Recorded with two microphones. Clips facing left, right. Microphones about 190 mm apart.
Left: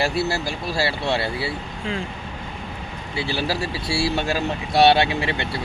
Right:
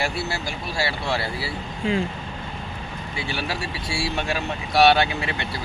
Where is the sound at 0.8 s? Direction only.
25° left (ahead or behind).